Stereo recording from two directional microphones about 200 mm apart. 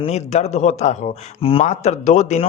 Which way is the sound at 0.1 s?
35° left (ahead or behind).